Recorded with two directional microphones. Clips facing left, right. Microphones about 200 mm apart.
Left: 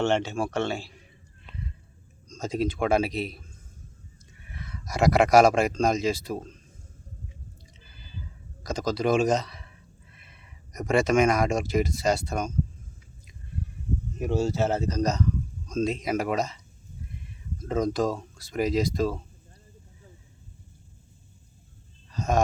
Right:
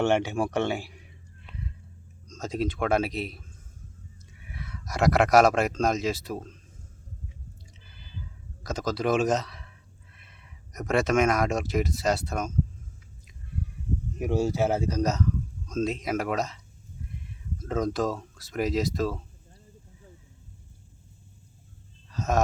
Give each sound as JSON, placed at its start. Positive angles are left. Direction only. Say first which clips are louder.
{"t": 0.0, "sound": "speech", "louder": "right 1 dB", "side_deg": -15}
{"t": 2.2, "sound": "speech", "louder": "left 2 dB", "side_deg": 0}
{"t": 4.4, "sound": "speech", "louder": "even", "side_deg": -5}
{"t": 8.6, "sound": "speech", "louder": "left 2 dB", "side_deg": -5}
{"t": 14.2, "sound": "speech", "louder": "even", "side_deg": -15}
{"t": 17.6, "sound": "speech", "louder": "left 2 dB", "side_deg": 0}
{"t": 22.1, "sound": "a sound", "louder": "left 1 dB", "side_deg": -5}